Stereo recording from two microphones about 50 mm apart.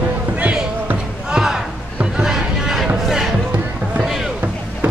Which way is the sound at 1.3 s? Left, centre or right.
Centre.